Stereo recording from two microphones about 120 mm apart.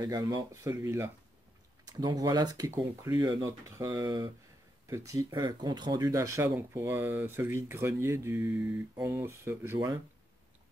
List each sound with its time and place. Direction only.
0.0 s speech: 35° right (ahead or behind)
1.9 s speech: 30° right (ahead or behind)